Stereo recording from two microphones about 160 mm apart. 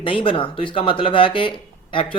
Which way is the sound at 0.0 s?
35° left (ahead or behind).